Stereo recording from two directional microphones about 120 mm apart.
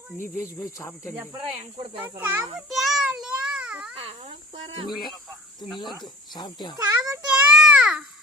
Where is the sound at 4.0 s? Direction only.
55° right (ahead or behind).